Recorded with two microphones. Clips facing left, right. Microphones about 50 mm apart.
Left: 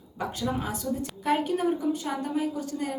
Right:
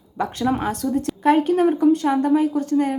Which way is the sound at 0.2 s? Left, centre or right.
Right.